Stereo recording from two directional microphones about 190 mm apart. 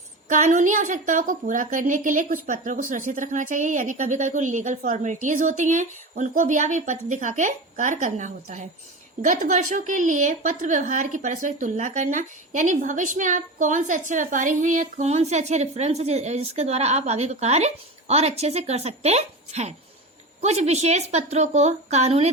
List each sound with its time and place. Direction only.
0.3 s a woman's voice: 40° right (ahead or behind)